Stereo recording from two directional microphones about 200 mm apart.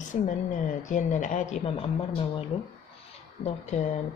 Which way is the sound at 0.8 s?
40° left (ahead or behind).